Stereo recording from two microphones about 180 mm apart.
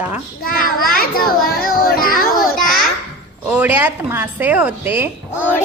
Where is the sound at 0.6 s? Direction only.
55° left (ahead or behind).